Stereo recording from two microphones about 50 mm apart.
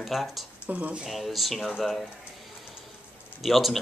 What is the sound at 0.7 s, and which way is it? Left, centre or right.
Speech, right.